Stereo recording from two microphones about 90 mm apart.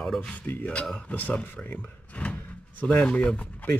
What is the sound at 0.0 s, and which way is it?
Speech, 5° left (ahead or behind).